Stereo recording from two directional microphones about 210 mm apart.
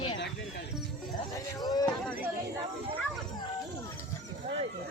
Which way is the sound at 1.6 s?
20° left (ahead or behind).